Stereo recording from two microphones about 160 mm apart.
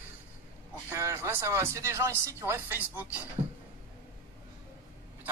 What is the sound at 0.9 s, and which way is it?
Speech, 15° right (ahead or behind).